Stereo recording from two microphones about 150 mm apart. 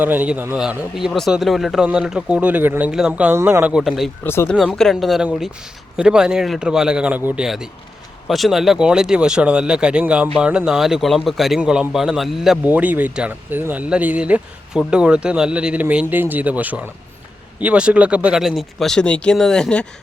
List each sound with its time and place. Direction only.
0.0 s a man's voice: 10° right (ahead or behind)
4.2 s speech: 15° left (ahead or behind)
4.4 s a man's voice: 5° left (ahead or behind)